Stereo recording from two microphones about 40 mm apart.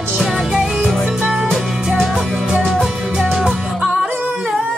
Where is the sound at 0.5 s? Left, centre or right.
Centre.